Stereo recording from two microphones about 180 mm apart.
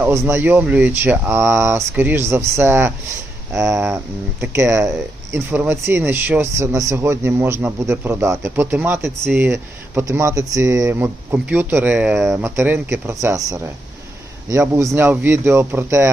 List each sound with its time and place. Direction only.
0.0 s speech: 15° right (ahead or behind)